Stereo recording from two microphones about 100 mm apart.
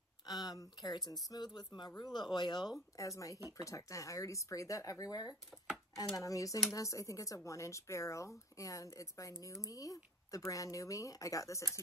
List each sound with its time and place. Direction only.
0.3 s speech: 40° left (ahead or behind)
3.0 s speech: 35° left (ahead or behind)